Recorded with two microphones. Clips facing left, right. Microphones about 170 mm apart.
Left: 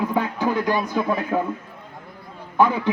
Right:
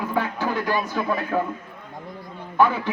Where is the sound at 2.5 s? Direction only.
15° left (ahead or behind).